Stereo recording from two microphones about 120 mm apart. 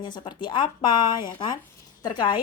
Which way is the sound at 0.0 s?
40° left (ahead or behind).